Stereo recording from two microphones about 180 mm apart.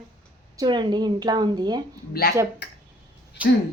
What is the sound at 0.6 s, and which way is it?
A woman's voice, 25° right (ahead or behind).